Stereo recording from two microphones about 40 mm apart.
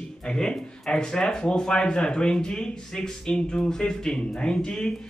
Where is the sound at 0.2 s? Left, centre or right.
Left.